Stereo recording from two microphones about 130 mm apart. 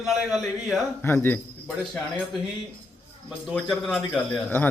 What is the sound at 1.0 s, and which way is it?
Speech, 15° left (ahead or behind).